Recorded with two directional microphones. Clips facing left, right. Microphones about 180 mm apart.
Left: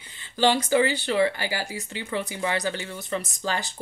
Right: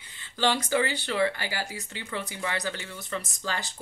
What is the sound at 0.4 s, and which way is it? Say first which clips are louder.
Speech: left 5 dB; 15° left (ahead or behind).